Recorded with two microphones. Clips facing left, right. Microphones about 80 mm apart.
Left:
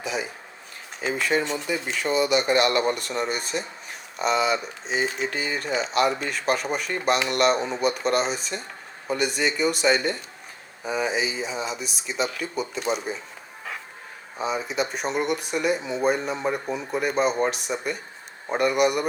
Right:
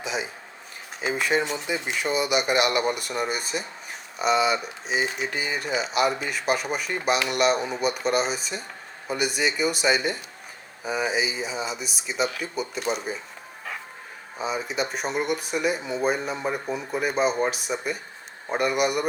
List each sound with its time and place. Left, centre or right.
0.0 s a sound: centre
1.0 s speech: centre
14.3 s speech: centre